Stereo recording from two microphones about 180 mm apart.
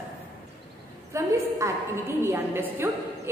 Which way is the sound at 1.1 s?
15° right (ahead or behind).